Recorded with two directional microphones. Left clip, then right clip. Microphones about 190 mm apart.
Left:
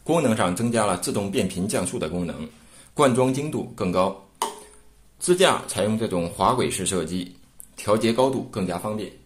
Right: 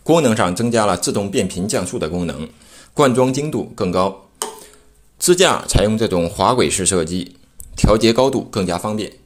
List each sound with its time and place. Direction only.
0.0 s speech: 25° right (ahead or behind)
5.2 s speech: 35° right (ahead or behind)